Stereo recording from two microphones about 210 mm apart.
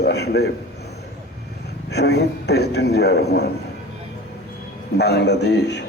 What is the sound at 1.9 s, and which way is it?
A man's voice, 50° left (ahead or behind).